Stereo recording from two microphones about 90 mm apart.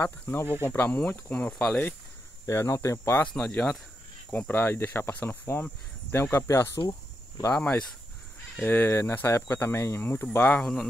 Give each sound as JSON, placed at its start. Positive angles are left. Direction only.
{"t": 0.0, "sound": "speech", "side_deg": 25}
{"t": 2.4, "sound": "speech", "side_deg": 30}
{"t": 3.3, "sound": "speech", "side_deg": 15}
{"t": 6.9, "sound": "cricket", "side_deg": 35}
{"t": 7.5, "sound": "speech", "side_deg": 15}
{"t": 10.6, "sound": "speech", "side_deg": 5}